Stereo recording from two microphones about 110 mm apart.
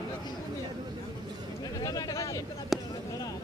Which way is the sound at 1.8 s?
30° left (ahead or behind).